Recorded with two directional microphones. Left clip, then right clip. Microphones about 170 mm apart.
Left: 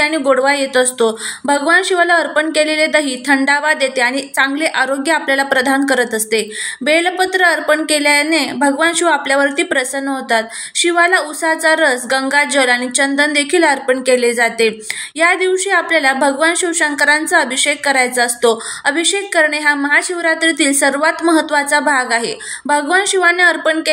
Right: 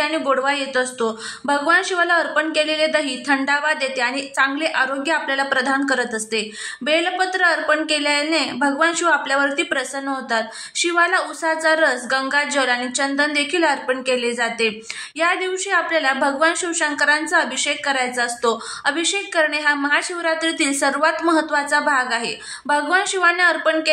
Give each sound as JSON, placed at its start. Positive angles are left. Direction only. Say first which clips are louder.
{"t": 0.0, "sound": "a woman's voice", "louder": "left 6 dB", "side_deg": 20}